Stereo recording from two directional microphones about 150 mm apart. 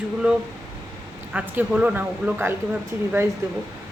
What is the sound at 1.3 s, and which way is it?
Speech, 10° right (ahead or behind).